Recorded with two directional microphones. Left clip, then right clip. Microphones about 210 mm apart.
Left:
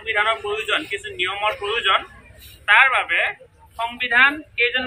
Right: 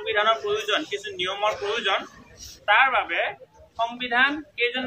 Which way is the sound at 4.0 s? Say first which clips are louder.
Left 7 dB; 10° right (ahead or behind).